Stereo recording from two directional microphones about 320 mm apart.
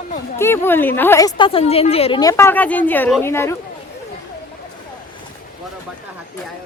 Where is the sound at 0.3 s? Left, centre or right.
Centre.